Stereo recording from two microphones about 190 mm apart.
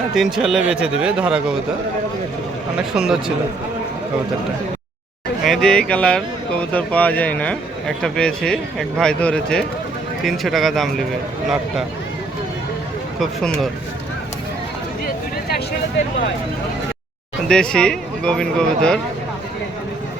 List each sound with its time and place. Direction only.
0.1 s speech: centre (ahead or behind)
2.9 s speech: 5° right (ahead or behind)
5.5 s speech: centre (ahead or behind)
13.1 s speech: centre (ahead or behind)
15.0 s a sound: 55° left (ahead or behind)
17.5 s speech: 5° left (ahead or behind)